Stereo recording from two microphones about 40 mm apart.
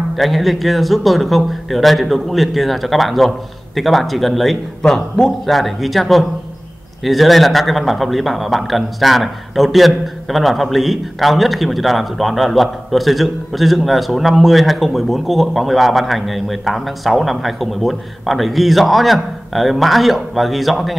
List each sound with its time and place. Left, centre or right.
0.1 s speech: centre
4.8 s a man's voice: centre
5.5 s speech: centre